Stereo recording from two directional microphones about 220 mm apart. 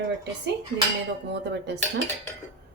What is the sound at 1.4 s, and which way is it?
Speech, 50° right (ahead or behind).